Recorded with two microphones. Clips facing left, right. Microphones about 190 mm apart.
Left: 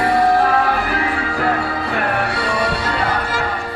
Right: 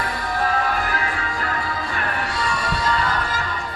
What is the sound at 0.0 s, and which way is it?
Music, 65° left (ahead or behind).